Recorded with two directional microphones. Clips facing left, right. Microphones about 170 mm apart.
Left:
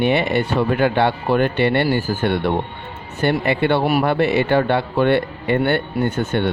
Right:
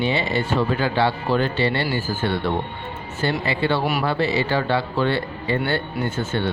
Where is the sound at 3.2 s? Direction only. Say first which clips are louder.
Left 5 dB; 55° left (ahead or behind).